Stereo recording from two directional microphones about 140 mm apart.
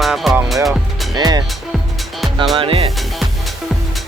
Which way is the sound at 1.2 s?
30° right (ahead or behind).